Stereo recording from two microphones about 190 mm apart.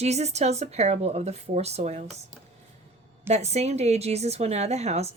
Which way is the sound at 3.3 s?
35° right (ahead or behind).